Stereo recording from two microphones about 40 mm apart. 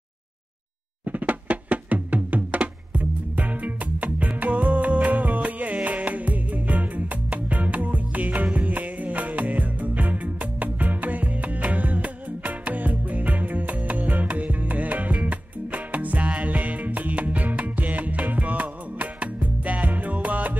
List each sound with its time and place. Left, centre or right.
1.0 s music: right